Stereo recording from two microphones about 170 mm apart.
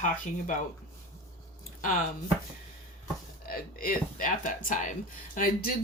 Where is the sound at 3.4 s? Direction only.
55° left (ahead or behind).